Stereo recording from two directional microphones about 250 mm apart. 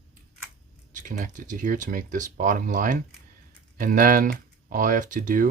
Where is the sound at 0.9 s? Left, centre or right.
Right.